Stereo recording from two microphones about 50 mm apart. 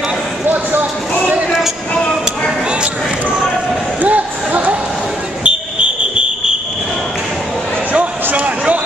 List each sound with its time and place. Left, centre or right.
0.5 s basketball bounce: right
2.7 s basketball bounce: centre
4.0 s basketball bounce: right
5.4 s fire alarm: right
7.9 s a sound: right